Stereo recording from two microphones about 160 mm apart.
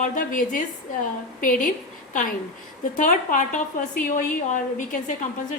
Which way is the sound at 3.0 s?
55° left (ahead or behind).